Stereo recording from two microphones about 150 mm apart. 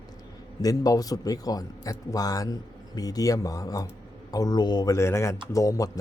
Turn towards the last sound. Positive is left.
turn(degrees=20)  # may be behind; listen again after turning